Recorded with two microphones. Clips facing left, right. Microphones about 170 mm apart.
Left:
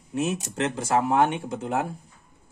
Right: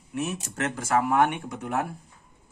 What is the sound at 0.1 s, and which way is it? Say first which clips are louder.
Speech: left 4 dB; 25° left (ahead or behind).